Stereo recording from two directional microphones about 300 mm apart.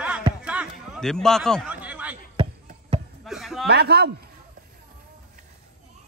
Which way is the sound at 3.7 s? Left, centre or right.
Right.